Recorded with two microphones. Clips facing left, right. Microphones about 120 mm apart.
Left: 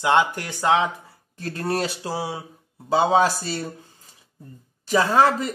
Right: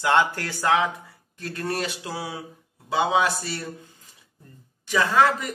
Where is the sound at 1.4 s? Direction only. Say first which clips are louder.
Left 3 dB; 35° left (ahead or behind).